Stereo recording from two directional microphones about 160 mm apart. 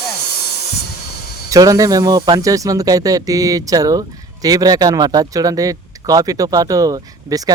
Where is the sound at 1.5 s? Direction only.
20° right (ahead or behind).